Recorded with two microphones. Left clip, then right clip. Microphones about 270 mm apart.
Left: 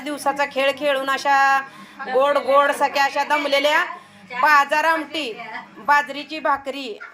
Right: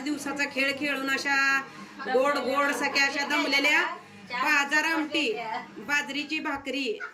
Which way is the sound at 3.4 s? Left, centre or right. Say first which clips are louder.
Left 4 dB; left.